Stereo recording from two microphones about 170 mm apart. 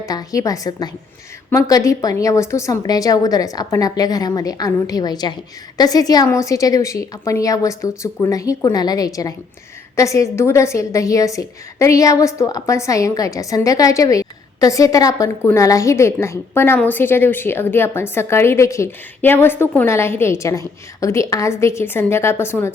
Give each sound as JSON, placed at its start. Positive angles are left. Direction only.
{"t": 0.0, "sound": "a woman's voice", "side_deg": 20}